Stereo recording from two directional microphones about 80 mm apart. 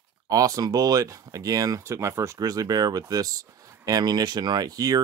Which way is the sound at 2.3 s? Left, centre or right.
Right.